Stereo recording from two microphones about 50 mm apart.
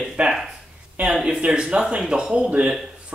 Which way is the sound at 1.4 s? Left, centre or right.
Centre.